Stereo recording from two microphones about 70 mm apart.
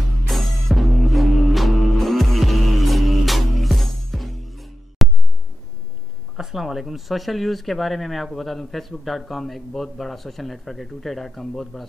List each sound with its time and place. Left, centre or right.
0.3 s music: centre
6.3 s speech: centre